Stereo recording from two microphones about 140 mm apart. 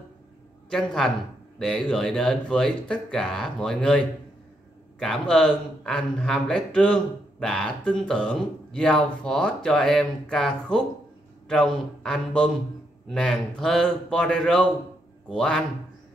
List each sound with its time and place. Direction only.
0.7 s speech: 5° left (ahead or behind)